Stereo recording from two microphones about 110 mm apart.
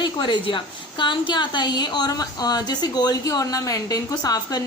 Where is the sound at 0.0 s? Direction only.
45° left (ahead or behind).